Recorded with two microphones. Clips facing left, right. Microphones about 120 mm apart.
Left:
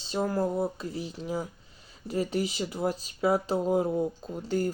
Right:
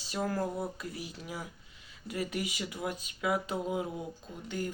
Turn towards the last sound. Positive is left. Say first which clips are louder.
# left 8 dB
turn(degrees=40)  # may be behind; listen again after turning